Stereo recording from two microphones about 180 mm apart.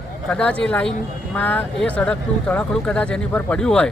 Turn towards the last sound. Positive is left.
turn(degrees=5)  # may be behind; listen again after turning